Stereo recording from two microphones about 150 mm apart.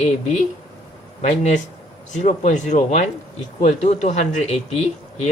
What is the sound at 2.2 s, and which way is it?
Speech, 50° left (ahead or behind).